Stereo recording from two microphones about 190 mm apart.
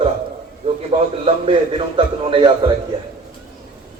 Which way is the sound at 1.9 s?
25° right (ahead or behind).